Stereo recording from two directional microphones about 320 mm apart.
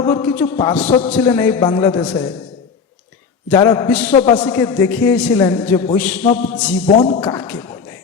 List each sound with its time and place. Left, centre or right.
0.0 s a man's voice: centre
0.9 s a sound: left
1.1 s a man's voice: centre
3.5 s a man's voice: centre
4.1 s a man's voice: centre
6.2 s a sound: left
7.0 s a man's voice: centre